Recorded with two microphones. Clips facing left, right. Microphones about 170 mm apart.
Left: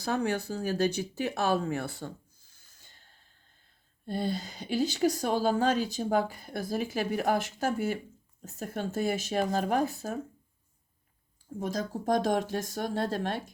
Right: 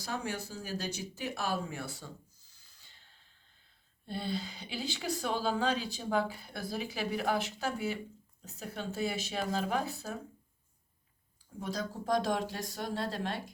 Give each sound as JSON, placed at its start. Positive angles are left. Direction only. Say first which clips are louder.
{"t": 0.0, "sound": "a woman's voice", "louder": "left 8 dB", "side_deg": 60}
{"t": 11.6, "sound": "a woman's voice", "louder": "left 5 dB", "side_deg": 45}